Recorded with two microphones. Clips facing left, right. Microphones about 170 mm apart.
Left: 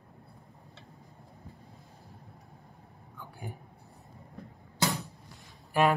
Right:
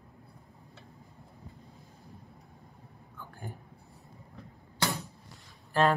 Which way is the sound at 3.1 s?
15° left (ahead or behind).